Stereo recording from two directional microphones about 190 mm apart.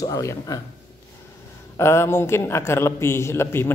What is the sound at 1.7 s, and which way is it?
A man's voice, 15° left (ahead or behind).